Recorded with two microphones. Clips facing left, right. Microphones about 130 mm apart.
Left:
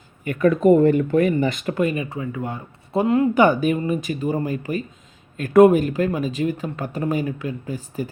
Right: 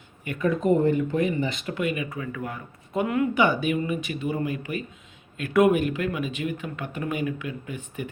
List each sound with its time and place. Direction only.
0.3 s speech: 60° left (ahead or behind); by 3.2 s 35° left (ahead or behind)
3.3 s speech: 45° left (ahead or behind)